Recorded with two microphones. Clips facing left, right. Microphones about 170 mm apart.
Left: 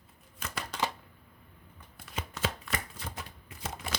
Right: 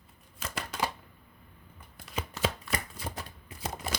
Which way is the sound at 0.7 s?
10° right (ahead or behind).